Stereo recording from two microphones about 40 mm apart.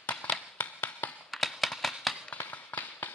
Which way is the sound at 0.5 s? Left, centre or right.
Left.